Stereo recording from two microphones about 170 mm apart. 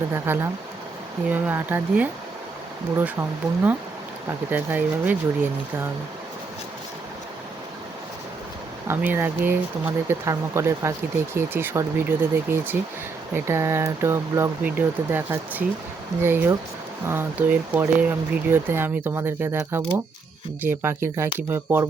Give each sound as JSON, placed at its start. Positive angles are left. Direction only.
{"t": 0.1, "sound": "speech", "side_deg": -15}
{"t": 8.9, "sound": "speech", "side_deg": -10}
{"t": 20.8, "sound": "speech", "side_deg": -15}